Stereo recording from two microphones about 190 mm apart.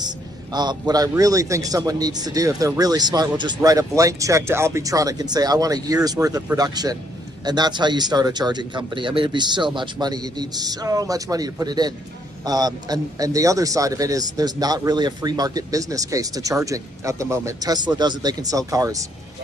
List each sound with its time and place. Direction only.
0.0 s a man's voice: 20° right (ahead or behind)